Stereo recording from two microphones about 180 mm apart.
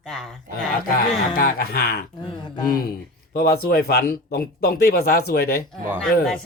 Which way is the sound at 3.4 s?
55° left (ahead or behind).